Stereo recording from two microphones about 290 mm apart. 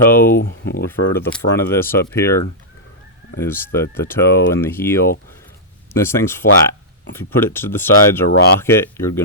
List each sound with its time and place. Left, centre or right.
0.0 s speech: centre
0.3 s speech: left
0.9 s speech: centre
3.4 s speech: centre